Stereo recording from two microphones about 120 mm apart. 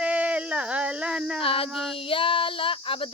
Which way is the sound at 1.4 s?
50° left (ahead or behind).